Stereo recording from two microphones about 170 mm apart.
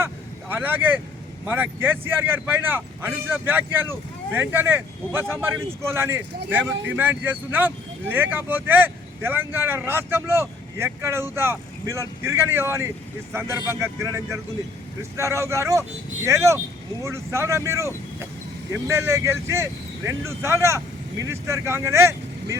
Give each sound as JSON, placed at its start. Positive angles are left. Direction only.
{"t": 0.0, "sound": "vehicle", "side_deg": -10}
{"t": 1.5, "sound": "speech", "side_deg": -10}